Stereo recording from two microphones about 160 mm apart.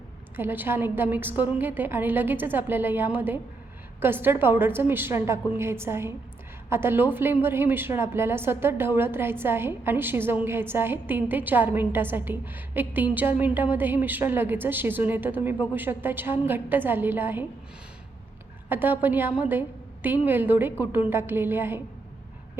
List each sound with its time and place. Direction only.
0.3 s a woman's voice: 10° right (ahead or behind)
18.7 s a woman's voice: 10° right (ahead or behind)